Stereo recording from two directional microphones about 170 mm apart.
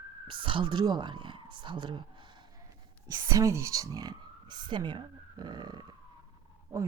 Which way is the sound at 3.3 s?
15° right (ahead or behind).